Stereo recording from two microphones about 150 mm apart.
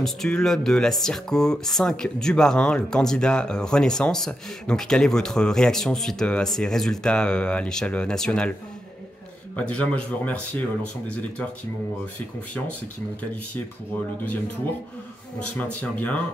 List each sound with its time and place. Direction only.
0.0 s speech: 5° left (ahead or behind)
9.6 s speech: 5° left (ahead or behind)
15.3 s speech: 5° left (ahead or behind)